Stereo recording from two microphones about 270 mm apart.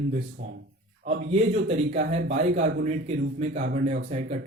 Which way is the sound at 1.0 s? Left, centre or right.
Right.